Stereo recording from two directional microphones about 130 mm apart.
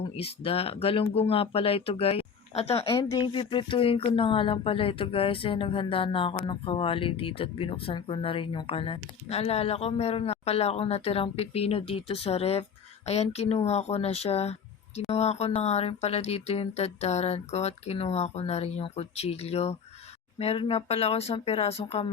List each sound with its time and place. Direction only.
0.2 s speech: 50° left (ahead or behind)
2.9 s speech: 25° left (ahead or behind)
3.2 s speech: 40° left (ahead or behind)